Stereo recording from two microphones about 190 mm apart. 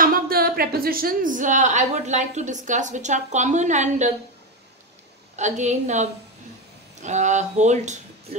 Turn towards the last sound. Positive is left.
turn(degrees=-40)  # may be behind; listen again after turning